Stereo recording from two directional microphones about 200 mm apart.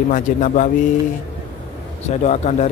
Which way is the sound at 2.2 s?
35° left (ahead or behind).